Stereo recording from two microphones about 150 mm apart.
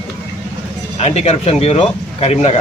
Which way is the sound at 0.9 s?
45° left (ahead or behind).